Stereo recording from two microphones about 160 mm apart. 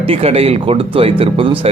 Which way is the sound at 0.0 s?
35° right (ahead or behind).